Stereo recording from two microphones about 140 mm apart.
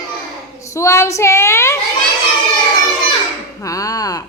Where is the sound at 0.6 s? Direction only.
20° left (ahead or behind).